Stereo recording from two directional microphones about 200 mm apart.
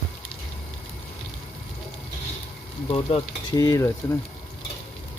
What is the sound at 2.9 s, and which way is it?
Frying, 20° left (ahead or behind).